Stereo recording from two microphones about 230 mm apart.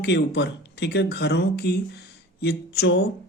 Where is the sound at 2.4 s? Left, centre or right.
Left.